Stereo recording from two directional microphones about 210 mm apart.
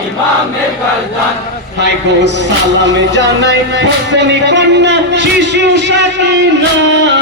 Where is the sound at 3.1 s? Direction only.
55° right (ahead or behind).